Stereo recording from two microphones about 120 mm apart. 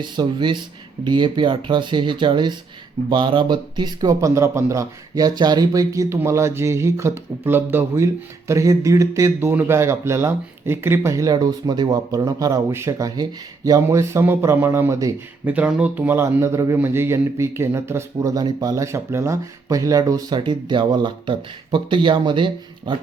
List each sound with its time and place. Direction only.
0.0 s speech: 40° right (ahead or behind)
15.4 s speech: 10° right (ahead or behind); by 23.0 s 40° right (ahead or behind)